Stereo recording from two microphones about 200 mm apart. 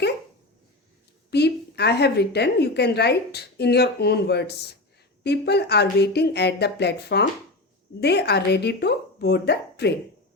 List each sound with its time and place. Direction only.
1.3 s a woman's voice: 55° left (ahead or behind)